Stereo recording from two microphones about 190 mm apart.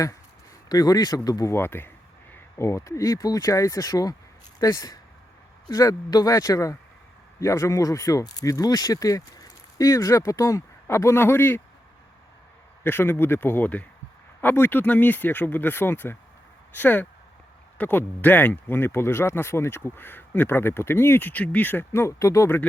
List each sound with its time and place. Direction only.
0.7 s speech: 20° left (ahead or behind)
12.8 s speech: 10° left (ahead or behind)